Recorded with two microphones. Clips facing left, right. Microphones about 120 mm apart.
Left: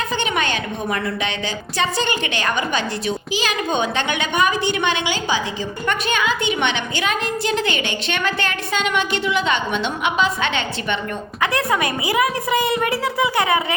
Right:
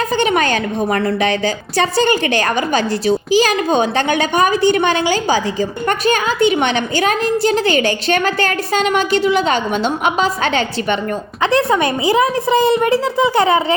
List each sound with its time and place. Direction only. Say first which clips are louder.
0.2 s a woman's voice: right 7 dB; 40° right (ahead or behind)
11.5 s a child's voice: right 8 dB; 30° right (ahead or behind)